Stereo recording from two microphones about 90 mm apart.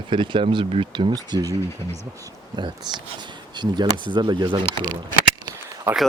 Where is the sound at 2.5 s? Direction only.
55° right (ahead or behind).